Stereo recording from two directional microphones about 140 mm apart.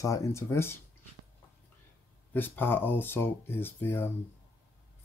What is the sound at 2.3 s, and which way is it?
Speech, 15° left (ahead or behind).